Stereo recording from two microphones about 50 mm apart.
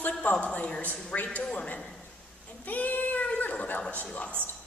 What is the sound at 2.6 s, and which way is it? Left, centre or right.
A woman's voice, left.